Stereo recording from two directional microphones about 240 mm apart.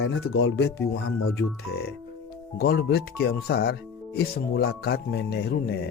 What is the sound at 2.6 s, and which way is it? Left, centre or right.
Speech, left.